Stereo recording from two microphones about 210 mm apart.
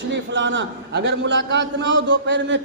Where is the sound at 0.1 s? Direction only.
60° right (ahead or behind).